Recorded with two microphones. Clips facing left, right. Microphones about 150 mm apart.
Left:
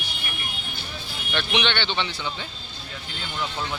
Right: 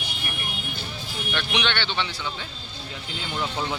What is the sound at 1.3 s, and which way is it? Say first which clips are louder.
Speech: left 2 dB; 5° right (ahead or behind).